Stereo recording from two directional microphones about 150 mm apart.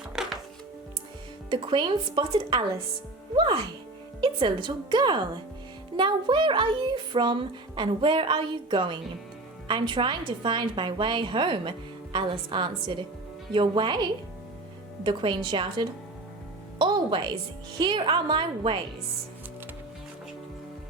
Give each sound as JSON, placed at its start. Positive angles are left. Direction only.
{"t": 0.2, "sound": "music", "side_deg": -5}
{"t": 1.5, "sound": "a woman's voice", "side_deg": -30}
{"t": 15.0, "sound": "a woman's voice", "side_deg": -30}
{"t": 16.7, "sound": "music", "side_deg": -30}
{"t": 17.7, "sound": "a woman's voice", "side_deg": -30}